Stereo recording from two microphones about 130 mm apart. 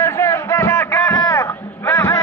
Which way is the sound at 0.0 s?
20° left (ahead or behind).